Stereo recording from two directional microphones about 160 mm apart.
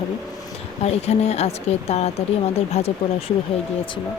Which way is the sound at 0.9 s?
40° left (ahead or behind).